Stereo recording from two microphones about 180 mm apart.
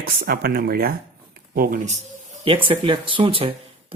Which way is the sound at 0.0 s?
60° right (ahead or behind).